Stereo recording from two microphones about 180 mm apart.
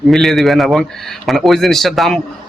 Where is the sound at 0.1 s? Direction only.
Centre (ahead or behind).